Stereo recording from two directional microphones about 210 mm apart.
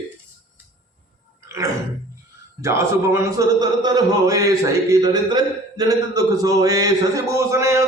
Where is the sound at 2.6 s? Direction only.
15° right (ahead or behind).